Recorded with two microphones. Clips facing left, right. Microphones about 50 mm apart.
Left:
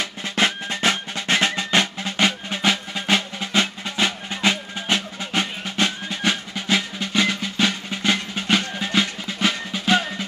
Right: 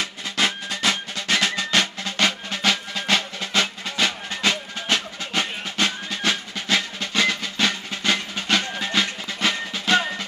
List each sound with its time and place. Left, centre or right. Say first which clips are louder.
0.0 s music: left 2 dB; left
6.0 s percussion: left 1 dB; centre
9.4 s music: left 1 dB; centre